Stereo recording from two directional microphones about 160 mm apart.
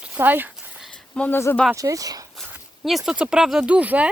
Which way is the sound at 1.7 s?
20° right (ahead or behind).